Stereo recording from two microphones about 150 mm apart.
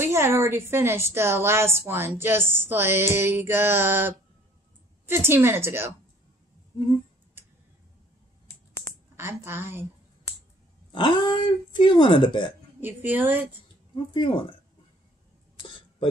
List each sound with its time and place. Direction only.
0.0 s a woman's voice: 15° right (ahead or behind)
9.1 s a woman's voice: 15° right (ahead or behind)
10.9 s speech: 35° left (ahead or behind)
12.8 s a woman's voice: 10° right (ahead or behind)
14.1 s speech: 35° left (ahead or behind)